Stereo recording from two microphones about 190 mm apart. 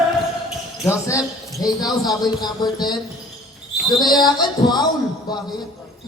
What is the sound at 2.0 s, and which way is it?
Music, 20° left (ahead or behind).